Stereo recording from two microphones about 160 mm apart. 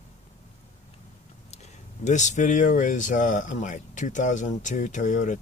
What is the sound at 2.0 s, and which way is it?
Speech, 50° left (ahead or behind).